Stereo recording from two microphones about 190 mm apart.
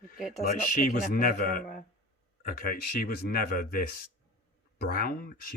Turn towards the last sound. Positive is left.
turn(degrees=50)  # may be behind; listen again after turning